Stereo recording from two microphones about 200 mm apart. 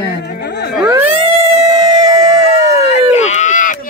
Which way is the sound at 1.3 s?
30° right (ahead or behind).